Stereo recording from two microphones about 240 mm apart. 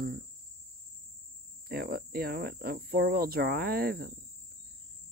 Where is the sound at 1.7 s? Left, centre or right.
Right.